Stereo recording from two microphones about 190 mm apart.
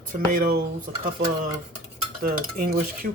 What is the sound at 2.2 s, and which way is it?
Dishes, 50° right (ahead or behind).